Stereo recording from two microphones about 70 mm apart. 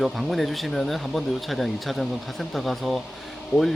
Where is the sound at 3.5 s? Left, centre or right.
Left.